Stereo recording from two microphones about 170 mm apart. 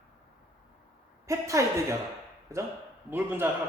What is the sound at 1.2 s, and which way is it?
A man's voice, 20° right (ahead or behind).